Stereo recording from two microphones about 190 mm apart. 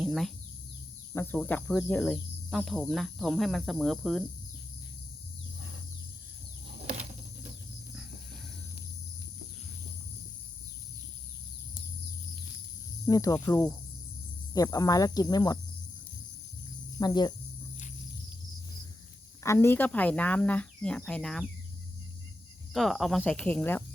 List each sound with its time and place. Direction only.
0.0 s bird: centre (ahead or behind)
1.1 s speech: 10° left (ahead or behind)
13.1 s speech: 15° left (ahead or behind)
17.0 s speech: 20° left (ahead or behind)
19.4 s speech: 15° left (ahead or behind)
22.7 s speech: centre (ahead or behind)